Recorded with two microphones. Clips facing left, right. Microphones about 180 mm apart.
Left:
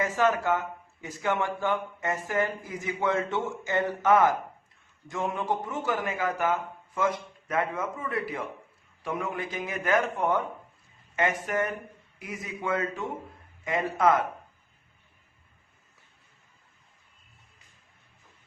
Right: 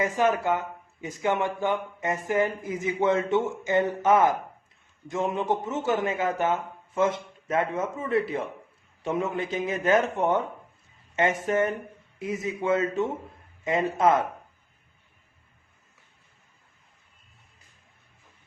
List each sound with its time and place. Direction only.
0.0 s a man's voice: 15° right (ahead or behind)